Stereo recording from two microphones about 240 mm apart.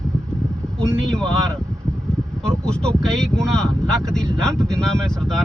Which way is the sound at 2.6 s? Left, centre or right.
Centre.